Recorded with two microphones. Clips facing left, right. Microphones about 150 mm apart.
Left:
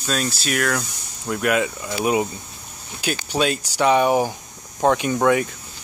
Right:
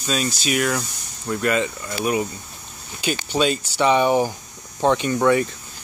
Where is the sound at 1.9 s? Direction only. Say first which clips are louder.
Left 3 dB; 20° left (ahead or behind).